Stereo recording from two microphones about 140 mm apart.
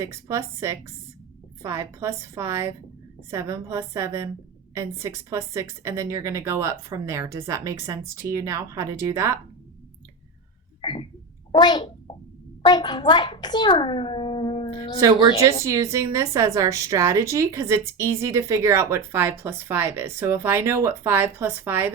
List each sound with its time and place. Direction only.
0.0 s a woman's voice: 20° right (ahead or behind)
10.8 s a sound: 40° left (ahead or behind)
11.5 s a child's voice: 30° left (ahead or behind)
15.0 s a woman's voice: 25° right (ahead or behind)